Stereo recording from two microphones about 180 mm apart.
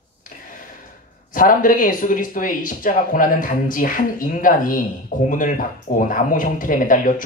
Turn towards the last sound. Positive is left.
turn(degrees=50)  # may be behind; listen again after turning